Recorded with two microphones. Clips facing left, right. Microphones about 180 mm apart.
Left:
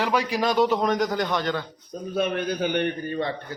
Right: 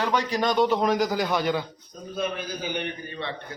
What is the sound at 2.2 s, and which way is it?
A man's voice, 65° left (ahead or behind).